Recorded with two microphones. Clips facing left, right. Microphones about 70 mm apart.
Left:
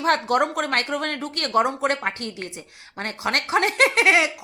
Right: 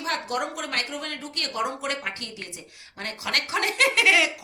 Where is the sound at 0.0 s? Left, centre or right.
Left.